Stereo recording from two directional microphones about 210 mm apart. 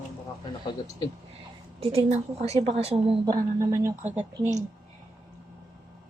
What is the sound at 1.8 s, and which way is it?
A woman's voice, 30° right (ahead or behind).